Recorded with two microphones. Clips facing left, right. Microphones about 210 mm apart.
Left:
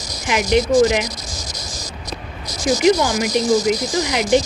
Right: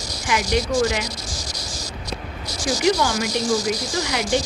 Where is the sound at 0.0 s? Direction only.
20° left (ahead or behind).